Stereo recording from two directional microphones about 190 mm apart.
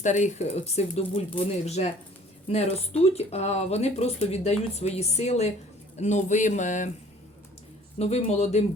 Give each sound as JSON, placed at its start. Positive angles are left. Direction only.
{"t": 0.0, "sound": "speech", "side_deg": 40}
{"t": 7.9, "sound": "speech", "side_deg": 35}